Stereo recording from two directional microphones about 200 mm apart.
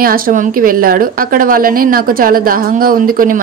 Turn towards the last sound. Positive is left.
turn(degrees=-45)  # may be behind; listen again after turning